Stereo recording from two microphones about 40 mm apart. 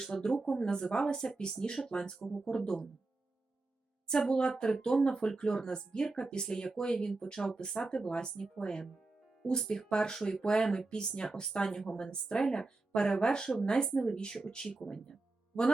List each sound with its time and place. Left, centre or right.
0.0 s speech: centre
4.0 s speech: left
14.9 s a sound: centre